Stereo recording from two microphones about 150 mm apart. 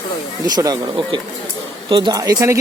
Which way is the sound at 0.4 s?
25° right (ahead or behind).